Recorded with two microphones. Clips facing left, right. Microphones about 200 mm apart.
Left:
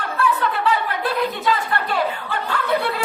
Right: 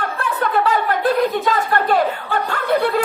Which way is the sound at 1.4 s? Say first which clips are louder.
Right 3 dB; 45° right (ahead or behind).